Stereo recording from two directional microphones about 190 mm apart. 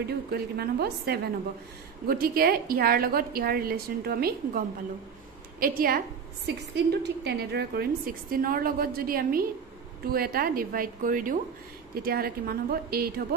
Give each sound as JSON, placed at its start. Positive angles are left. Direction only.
{"t": 0.0, "sound": "a woman's voice", "side_deg": -55}